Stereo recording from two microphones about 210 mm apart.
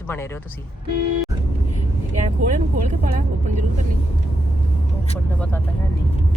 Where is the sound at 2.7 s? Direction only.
35° right (ahead or behind).